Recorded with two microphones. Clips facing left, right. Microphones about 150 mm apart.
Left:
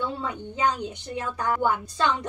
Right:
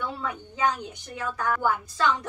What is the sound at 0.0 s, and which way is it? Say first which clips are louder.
A woman's voice: left 2 dB; 20° left (ahead or behind).